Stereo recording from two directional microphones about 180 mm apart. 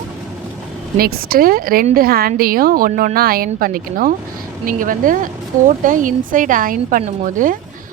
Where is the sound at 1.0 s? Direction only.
55° right (ahead or behind).